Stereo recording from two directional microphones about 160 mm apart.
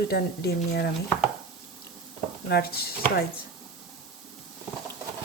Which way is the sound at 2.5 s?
80° left.